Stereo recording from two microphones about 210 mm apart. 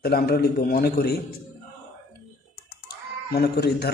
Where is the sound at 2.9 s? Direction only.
50° left (ahead or behind).